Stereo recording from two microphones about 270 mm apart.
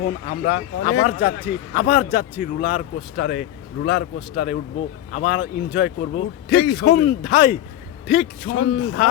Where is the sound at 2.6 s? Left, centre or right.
Left.